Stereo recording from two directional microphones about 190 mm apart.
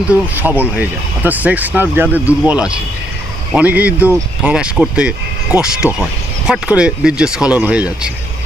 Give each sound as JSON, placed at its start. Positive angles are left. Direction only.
{"t": 0.1, "sound": "speech", "side_deg": -10}
{"t": 5.8, "sound": "speech", "side_deg": 15}
{"t": 6.5, "sound": "speech", "side_deg": -5}